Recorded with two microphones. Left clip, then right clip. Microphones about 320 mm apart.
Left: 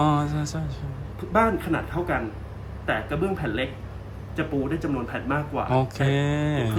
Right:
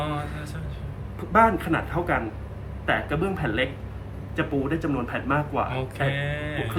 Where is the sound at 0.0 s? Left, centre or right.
Centre.